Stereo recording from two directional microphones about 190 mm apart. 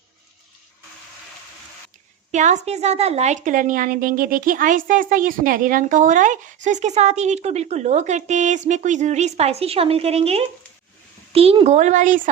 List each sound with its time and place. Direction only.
2.3 s a woman's voice: 40° right (ahead or behind)